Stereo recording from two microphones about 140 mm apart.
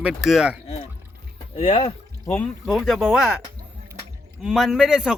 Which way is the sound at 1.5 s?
50° left (ahead or behind).